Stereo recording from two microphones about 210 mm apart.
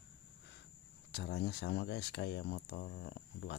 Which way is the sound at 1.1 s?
55° left (ahead or behind).